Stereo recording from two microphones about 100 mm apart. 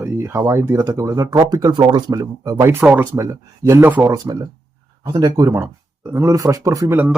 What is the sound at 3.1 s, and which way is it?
Speech, 35° right (ahead or behind).